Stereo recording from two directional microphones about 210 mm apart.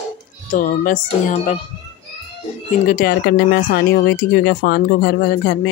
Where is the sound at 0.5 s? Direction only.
40° left (ahead or behind).